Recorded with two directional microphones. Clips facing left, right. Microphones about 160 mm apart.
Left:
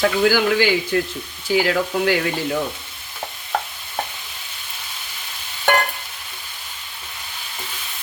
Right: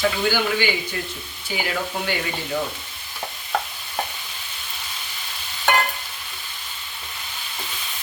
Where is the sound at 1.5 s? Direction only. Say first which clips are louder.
Left 8 dB; 90° left.